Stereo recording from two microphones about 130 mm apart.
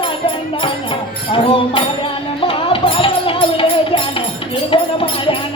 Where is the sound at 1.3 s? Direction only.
45° left (ahead or behind).